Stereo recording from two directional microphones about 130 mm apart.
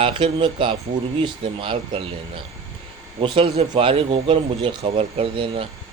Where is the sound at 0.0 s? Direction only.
40° right (ahead or behind).